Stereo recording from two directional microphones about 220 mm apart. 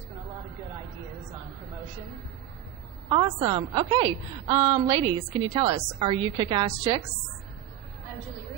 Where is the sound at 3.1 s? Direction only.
20° right (ahead or behind).